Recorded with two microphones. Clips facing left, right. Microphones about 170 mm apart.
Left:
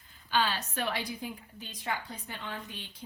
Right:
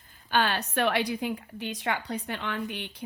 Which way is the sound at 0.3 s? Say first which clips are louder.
Right 4 dB; 60° right (ahead or behind).